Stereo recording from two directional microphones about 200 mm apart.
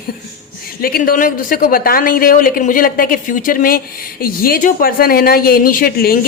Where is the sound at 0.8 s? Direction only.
45° left (ahead or behind).